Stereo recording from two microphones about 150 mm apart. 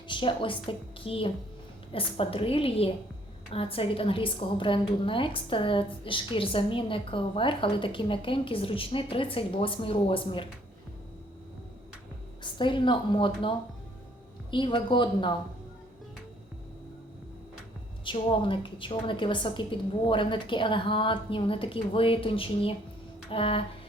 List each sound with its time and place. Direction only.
0.1 s a woman's voice: 35° left (ahead or behind)
12.4 s a woman's voice: 30° left (ahead or behind)
14.5 s a woman's voice: 35° left (ahead or behind)
18.0 s a woman's voice: 35° left (ahead or behind)